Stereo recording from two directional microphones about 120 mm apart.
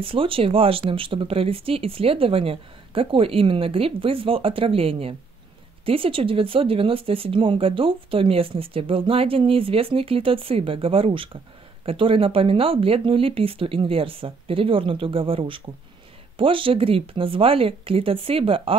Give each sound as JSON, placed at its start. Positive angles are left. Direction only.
{"t": 0.0, "sound": "speech", "side_deg": -50}